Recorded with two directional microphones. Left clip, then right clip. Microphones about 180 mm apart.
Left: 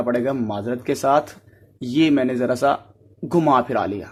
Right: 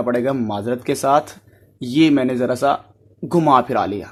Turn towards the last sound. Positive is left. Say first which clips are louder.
# right 3 dB
turn(degrees=-15)  # may be behind; listen again after turning